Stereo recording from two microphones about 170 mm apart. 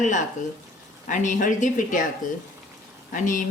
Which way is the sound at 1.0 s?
50° left (ahead or behind).